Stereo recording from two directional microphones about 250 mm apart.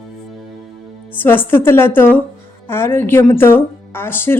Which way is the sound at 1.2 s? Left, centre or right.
Centre.